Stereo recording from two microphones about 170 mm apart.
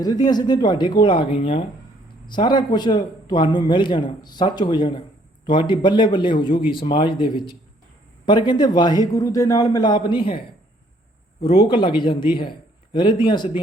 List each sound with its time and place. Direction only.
0.0 s speech: 25° left (ahead or behind)
11.7 s speech: 30° left (ahead or behind)